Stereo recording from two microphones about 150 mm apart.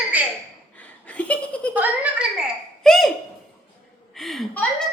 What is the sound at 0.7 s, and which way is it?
Laughter, 10° left (ahead or behind).